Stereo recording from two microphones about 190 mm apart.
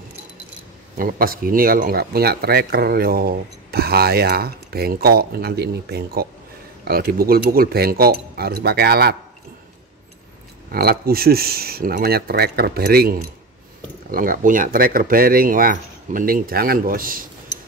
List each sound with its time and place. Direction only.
0.9 s speech: 50° right (ahead or behind)
10.7 s speech: 55° right (ahead or behind)